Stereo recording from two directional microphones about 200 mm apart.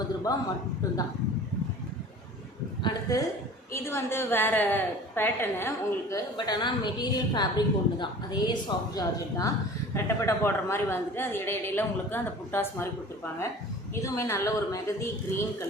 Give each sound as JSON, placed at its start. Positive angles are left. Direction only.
{"t": 2.8, "sound": "a woman's voice", "side_deg": 20}
{"t": 13.9, "sound": "a woman's voice", "side_deg": 15}